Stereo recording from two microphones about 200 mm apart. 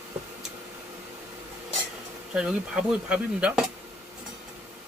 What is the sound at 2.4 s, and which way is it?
Speech, 5° right (ahead or behind).